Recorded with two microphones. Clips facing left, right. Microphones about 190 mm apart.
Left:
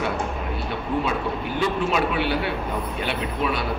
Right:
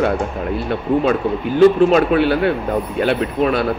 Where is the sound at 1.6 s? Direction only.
50° right (ahead or behind).